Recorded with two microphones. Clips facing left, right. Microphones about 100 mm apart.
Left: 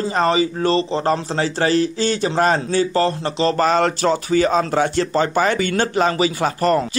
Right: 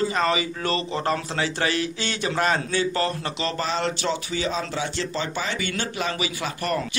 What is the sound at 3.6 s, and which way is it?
A man's voice, 50° left (ahead or behind).